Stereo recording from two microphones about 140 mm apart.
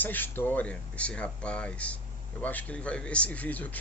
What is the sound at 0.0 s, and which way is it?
A man's voice, 15° left (ahead or behind).